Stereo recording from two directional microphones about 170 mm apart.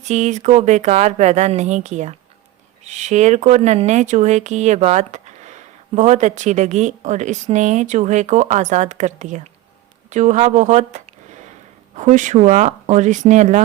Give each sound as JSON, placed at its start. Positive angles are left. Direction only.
{"t": 0.0, "sound": "speech", "side_deg": -45}
{"t": 10.1, "sound": "a sound", "side_deg": -45}
{"t": 11.9, "sound": "speech", "side_deg": -45}